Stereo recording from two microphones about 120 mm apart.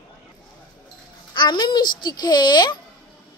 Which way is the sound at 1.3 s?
40° left (ahead or behind).